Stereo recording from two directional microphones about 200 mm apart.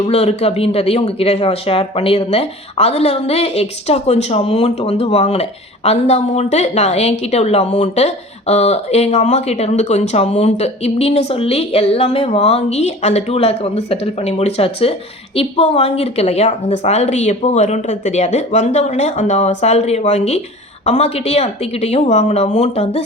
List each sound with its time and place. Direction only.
0.1 s speech: 30° left (ahead or behind)